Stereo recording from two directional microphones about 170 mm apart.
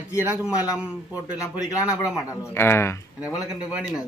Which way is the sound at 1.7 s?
20° left (ahead or behind).